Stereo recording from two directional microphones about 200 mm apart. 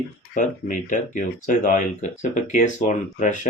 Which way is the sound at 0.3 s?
40° left (ahead or behind).